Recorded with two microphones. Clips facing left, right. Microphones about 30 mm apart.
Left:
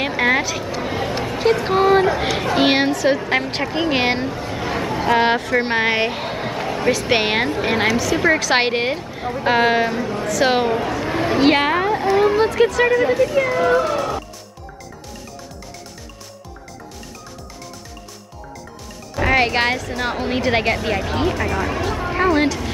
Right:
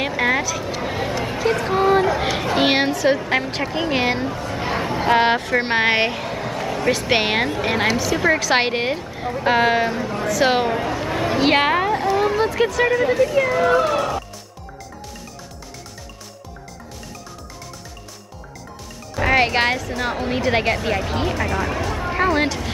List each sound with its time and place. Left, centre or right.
0.0 s speech: centre
0.8 s chatter: centre
1.5 s a sound: centre
2.3 s speech: centre
4.0 s speech: left
4.6 s a sound: centre
5.2 s speech: centre
6.1 s a sound: centre
6.9 s speech: centre
11.5 s a sound: centre
12.4 s speech: centre
19.1 s speech: centre